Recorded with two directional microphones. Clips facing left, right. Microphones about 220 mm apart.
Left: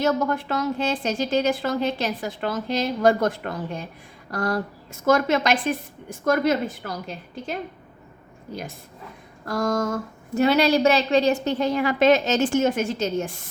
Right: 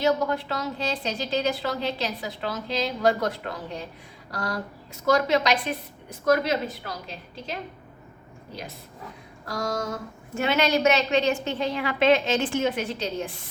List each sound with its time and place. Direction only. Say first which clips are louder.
0.0 s a woman's voice: left 1 dB; 50° left (ahead or behind)
9.5 s a woman's voice: left 6 dB; 50° left (ahead or behind)